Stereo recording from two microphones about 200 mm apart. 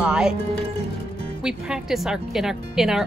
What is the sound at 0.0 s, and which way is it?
Music, 5° right (ahead or behind).